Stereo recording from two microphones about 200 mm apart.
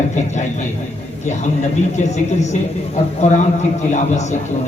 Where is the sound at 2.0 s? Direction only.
35° left (ahead or behind).